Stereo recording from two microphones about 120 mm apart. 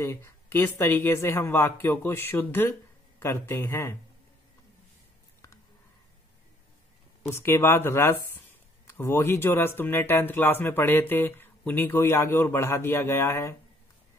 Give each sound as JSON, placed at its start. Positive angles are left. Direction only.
{"t": 0.0, "sound": "speech", "side_deg": 20}
{"t": 7.2, "sound": "speech", "side_deg": 20}